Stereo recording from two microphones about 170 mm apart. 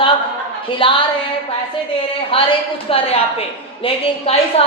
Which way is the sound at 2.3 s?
35° left (ahead or behind).